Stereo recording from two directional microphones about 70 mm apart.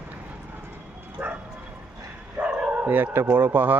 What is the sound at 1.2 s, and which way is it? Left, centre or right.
Speech, right.